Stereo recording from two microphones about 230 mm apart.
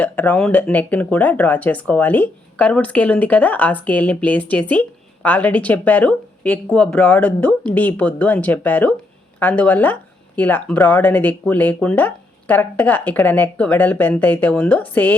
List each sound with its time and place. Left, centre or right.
0.0 s speech: centre